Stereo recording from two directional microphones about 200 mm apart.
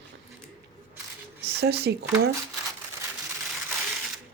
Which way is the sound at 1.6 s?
55° right (ahead or behind).